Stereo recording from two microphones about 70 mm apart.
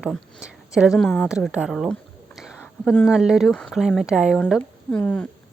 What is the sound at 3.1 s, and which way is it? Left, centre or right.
Speech, centre.